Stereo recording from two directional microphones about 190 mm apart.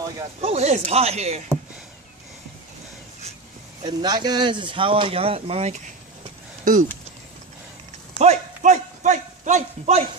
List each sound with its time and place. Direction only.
0.4 s speech: 35° right (ahead or behind)
3.8 s speech: 20° right (ahead or behind)
6.6 s speech: 45° right (ahead or behind)
8.2 s a sound: 35° right (ahead or behind)